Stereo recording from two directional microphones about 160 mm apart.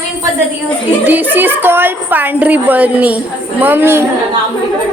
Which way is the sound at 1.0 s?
10° right (ahead or behind).